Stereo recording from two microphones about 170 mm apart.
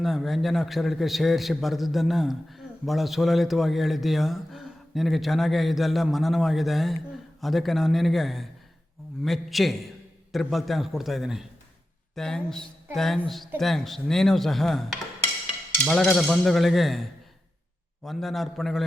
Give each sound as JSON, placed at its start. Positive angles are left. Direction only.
{"t": 0.0, "sound": "a man's voice", "side_deg": 0}